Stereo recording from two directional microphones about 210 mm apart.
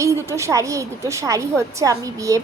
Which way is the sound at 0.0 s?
15° right (ahead or behind).